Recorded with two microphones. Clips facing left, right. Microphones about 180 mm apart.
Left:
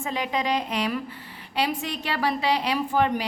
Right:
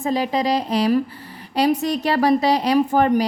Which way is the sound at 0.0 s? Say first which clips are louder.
Right 7 dB; 35° right (ahead or behind).